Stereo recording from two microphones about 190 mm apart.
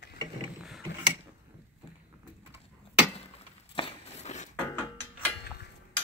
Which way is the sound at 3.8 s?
30° left (ahead or behind).